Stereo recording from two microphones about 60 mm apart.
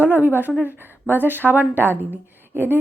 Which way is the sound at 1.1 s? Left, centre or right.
Right.